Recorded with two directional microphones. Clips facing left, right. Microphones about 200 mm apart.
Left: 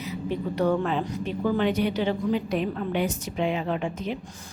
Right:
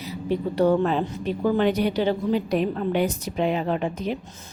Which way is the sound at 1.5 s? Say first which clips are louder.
Right 2 dB; 40° right (ahead or behind).